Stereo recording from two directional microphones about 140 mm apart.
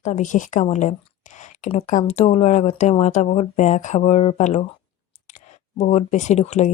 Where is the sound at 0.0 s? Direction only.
60° left (ahead or behind).